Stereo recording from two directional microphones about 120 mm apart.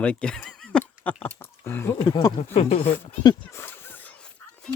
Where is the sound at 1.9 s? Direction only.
35° left (ahead or behind).